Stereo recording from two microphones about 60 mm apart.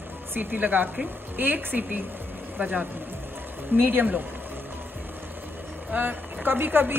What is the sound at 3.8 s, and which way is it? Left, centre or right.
Speech, right.